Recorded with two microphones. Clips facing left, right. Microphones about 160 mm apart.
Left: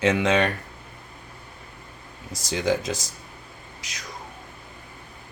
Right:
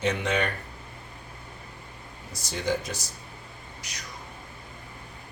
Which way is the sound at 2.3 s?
90° left.